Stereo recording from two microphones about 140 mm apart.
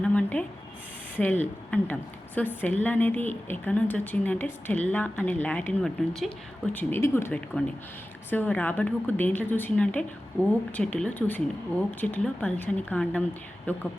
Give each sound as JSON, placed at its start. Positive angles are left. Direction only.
{"t": 0.0, "sound": "a sound", "side_deg": 10}
{"t": 1.2, "sound": "a woman's voice", "side_deg": 10}
{"t": 6.7, "sound": "a woman's voice", "side_deg": 15}